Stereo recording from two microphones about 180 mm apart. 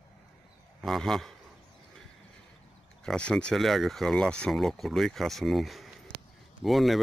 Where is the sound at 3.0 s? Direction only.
5° left (ahead or behind).